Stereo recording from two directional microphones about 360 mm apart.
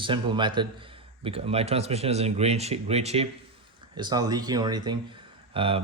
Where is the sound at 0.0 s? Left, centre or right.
Centre.